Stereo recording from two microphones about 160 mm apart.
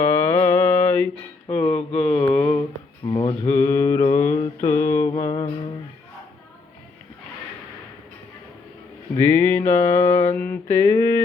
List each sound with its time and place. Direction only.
0.0 s music: 15° left (ahead or behind)
1.7 s mantra: 5° left (ahead or behind)
3.1 s mantra: 30° left (ahead or behind)
3.5 s mantra: 15° left (ahead or behind)
9.2 s music: 10° left (ahead or behind)
10.3 s mantra: 10° left (ahead or behind)